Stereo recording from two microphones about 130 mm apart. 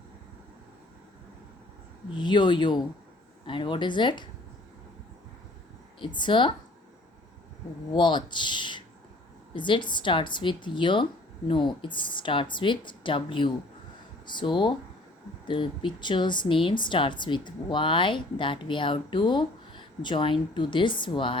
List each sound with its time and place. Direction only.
2.1 s a woman's voice: 35° left (ahead or behind)
6.0 s a woman's voice: 35° left (ahead or behind)
7.9 s a woman's voice: 35° left (ahead or behind)